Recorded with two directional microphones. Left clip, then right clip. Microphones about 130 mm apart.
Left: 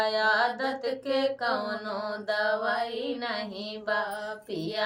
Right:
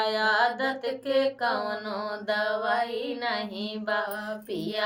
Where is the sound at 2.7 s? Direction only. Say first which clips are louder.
Right 2 dB; 15° left (ahead or behind).